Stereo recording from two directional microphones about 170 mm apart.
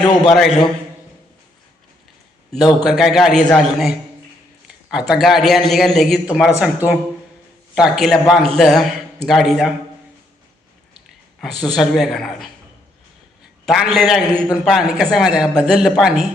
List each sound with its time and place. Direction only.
0.3 s a man's voice: centre (ahead or behind)
2.8 s a man's voice: centre (ahead or behind)
11.3 s a man's voice: centre (ahead or behind)
13.7 s a man's voice: centre (ahead or behind)